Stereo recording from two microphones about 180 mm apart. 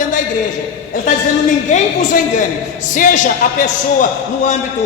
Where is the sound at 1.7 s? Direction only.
45° left (ahead or behind).